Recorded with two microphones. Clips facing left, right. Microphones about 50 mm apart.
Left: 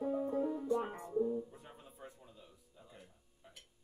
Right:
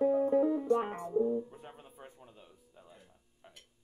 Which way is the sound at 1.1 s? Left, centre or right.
Right.